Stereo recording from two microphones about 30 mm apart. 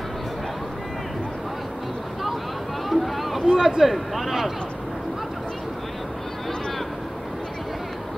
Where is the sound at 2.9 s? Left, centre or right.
Centre.